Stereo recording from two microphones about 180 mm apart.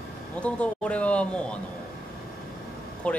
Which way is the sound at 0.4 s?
5° left (ahead or behind).